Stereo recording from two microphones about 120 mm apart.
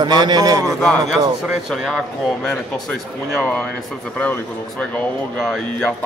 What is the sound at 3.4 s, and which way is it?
Speech, 15° left (ahead or behind).